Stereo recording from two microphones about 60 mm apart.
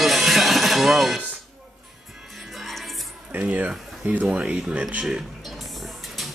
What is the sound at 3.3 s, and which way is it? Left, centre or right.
Speech, right.